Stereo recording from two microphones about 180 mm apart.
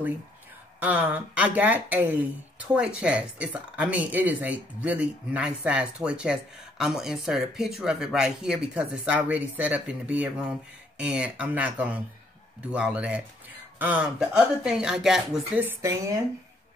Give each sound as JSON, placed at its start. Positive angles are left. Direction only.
{"t": 0.7, "sound": "speech", "side_deg": -10}